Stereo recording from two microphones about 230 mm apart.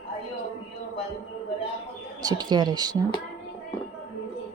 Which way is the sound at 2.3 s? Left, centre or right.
Centre.